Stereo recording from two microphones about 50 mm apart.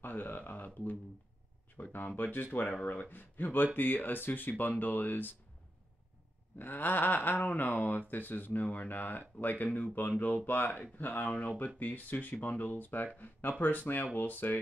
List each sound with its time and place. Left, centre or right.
0.0 s speech: left
6.6 s speech: left